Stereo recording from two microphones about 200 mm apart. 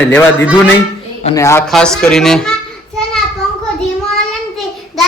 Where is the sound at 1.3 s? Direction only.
15° left (ahead or behind).